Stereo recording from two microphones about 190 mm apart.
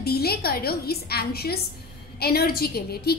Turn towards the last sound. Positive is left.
turn(degrees=55)  # may be behind; listen again after turning